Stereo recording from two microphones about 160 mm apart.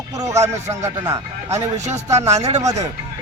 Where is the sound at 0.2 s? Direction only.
20° right (ahead or behind).